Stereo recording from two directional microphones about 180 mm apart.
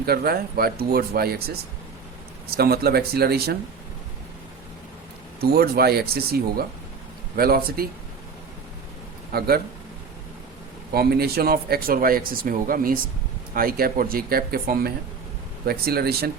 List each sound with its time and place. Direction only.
0.0 s speech: 60° right (ahead or behind)
2.5 s speech: 60° right (ahead or behind)
5.4 s speech: 60° right (ahead or behind)
9.3 s speech: 60° right (ahead or behind)
10.9 s speech: 60° right (ahead or behind)